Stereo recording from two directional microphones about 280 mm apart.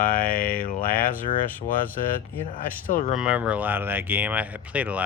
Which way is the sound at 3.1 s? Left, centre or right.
Centre.